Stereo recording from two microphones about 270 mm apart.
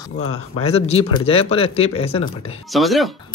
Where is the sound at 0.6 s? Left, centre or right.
Left.